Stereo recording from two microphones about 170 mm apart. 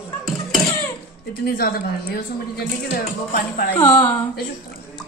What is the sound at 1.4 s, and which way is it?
A woman's voice, 60° left (ahead or behind).